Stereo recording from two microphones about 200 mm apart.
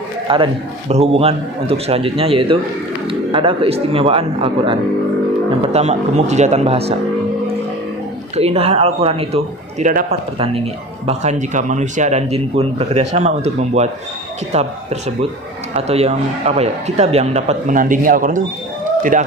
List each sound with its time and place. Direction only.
0.3 s a man's voice: 25° right (ahead or behind)
8.4 s speech: 30° right (ahead or behind)
10.3 s a man's voice: 30° right (ahead or behind)